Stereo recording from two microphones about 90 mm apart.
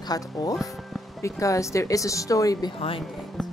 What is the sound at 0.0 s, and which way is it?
Speech, 45° left (ahead or behind).